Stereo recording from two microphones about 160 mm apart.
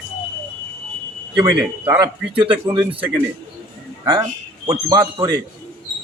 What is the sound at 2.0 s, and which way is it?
Speech, 30° right (ahead or behind).